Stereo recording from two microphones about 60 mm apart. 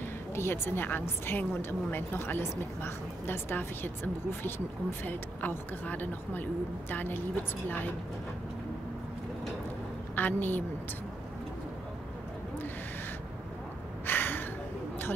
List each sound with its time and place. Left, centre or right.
0.3 s a woman's voice: left
10.1 s a woman's voice: left
14.0 s gasp: left